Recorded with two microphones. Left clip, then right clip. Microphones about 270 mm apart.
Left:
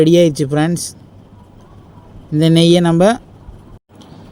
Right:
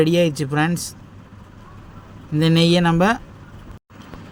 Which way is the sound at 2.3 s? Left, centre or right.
Centre.